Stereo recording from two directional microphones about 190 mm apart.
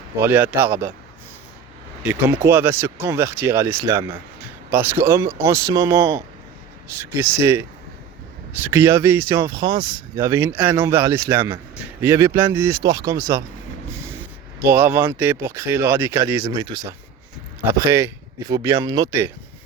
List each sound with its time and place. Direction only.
0.2 s speech: 10° right (ahead or behind)
2.0 s a man's voice: 10° right (ahead or behind)